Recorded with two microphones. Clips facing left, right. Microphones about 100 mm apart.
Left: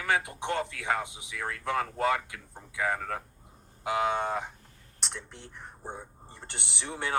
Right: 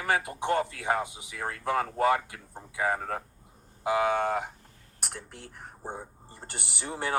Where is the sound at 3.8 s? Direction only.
30° right (ahead or behind).